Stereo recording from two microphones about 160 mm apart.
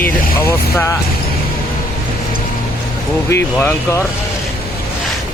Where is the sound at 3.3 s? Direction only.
15° left (ahead or behind).